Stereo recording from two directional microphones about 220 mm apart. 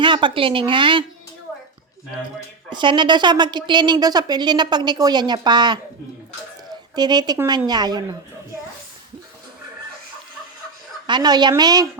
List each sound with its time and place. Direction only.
0.0 s a woman's voice: 20° right (ahead or behind)
2.6 s a woman's voice: 20° right (ahead or behind)
11.0 s a woman's voice: 20° right (ahead or behind)